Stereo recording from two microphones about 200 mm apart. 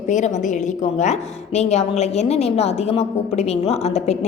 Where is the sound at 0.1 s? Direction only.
35° left (ahead or behind).